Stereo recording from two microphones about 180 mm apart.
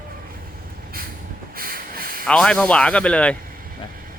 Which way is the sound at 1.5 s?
55° right (ahead or behind).